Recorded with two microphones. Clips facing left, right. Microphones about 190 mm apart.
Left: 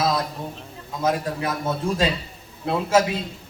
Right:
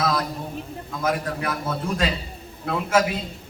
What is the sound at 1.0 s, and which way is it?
A man's voice, 25° left (ahead or behind).